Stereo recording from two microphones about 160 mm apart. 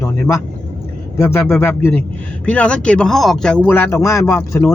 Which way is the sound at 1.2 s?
15° left (ahead or behind).